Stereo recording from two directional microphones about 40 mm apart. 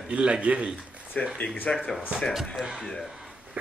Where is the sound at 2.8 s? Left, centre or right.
Centre.